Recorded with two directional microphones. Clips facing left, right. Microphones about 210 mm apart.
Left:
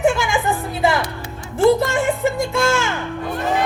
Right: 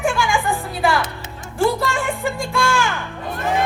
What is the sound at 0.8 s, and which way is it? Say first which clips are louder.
Music: even; 20° left (ahead or behind).